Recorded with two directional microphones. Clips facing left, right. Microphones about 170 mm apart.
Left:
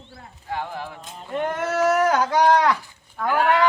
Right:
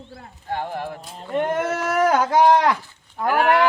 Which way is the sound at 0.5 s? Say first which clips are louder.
Right 3 dB; 50° right (ahead or behind).